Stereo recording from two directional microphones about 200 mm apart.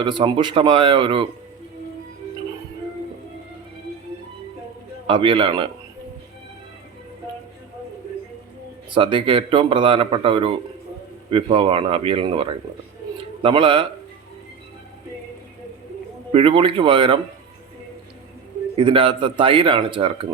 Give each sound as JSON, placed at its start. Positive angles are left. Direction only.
{"t": 0.0, "sound": "a man's voice", "side_deg": -25}
{"t": 5.0, "sound": "a man's voice", "side_deg": -25}
{"t": 8.9, "sound": "a man's voice", "side_deg": -25}
{"t": 16.3, "sound": "a man's voice", "side_deg": -25}
{"t": 18.8, "sound": "a man's voice", "side_deg": -25}